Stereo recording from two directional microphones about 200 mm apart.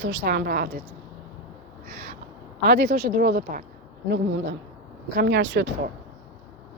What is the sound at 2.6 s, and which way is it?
Speech, 55° right (ahead or behind).